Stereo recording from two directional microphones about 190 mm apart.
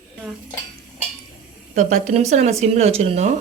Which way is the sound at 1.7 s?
40° right (ahead or behind).